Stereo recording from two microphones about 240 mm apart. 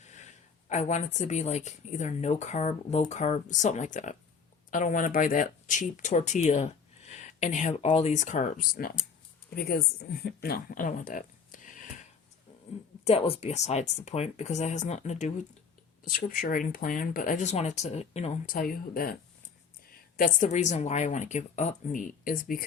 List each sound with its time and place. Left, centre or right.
0.0 s a sound: left
0.7 s speech: left
13.1 s speech: left
20.1 s speech: left